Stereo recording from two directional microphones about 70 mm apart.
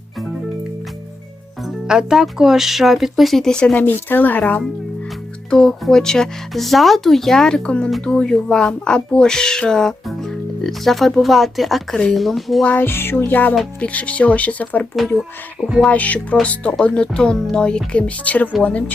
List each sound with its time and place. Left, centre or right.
1.6 s speech: centre
3.8 s speech: left
5.5 s speech: centre
12.6 s speech: left
15.9 s speech: left